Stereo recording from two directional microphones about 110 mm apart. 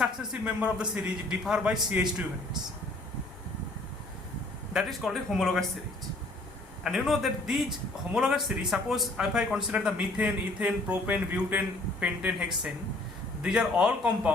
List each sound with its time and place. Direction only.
0.0 s speech: 5° right (ahead or behind)
4.7 s speech: centre (ahead or behind)
6.8 s speech: centre (ahead or behind)